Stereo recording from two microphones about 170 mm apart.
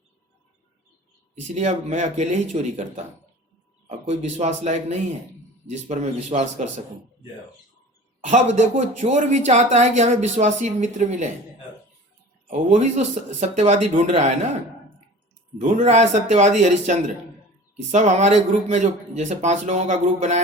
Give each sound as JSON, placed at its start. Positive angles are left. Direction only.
{"t": 1.5, "sound": "speech", "side_deg": -45}
{"t": 8.2, "sound": "speech", "side_deg": -45}
{"t": 12.5, "sound": "speech", "side_deg": -40}
{"t": 15.6, "sound": "speech", "side_deg": -45}